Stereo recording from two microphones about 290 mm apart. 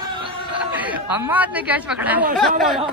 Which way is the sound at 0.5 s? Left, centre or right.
Centre.